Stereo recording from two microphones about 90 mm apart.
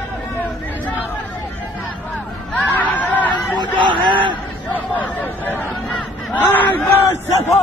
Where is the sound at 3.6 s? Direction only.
60° right (ahead or behind).